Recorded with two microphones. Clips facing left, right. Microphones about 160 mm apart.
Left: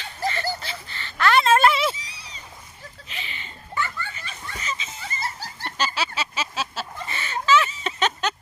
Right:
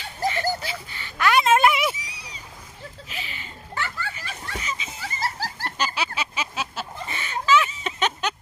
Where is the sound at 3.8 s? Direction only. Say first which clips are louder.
Left 2 dB; 85° right.